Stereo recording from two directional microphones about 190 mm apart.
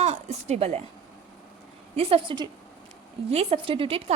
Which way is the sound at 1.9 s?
30° right (ahead or behind).